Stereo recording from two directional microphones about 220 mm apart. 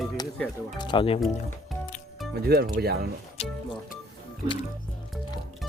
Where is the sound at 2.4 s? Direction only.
45° right (ahead or behind).